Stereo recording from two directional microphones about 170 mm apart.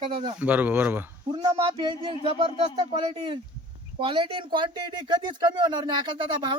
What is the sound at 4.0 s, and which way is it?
Speech, 30° right (ahead or behind).